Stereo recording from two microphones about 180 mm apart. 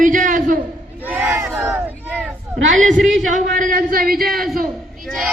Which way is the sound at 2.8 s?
45° right (ahead or behind).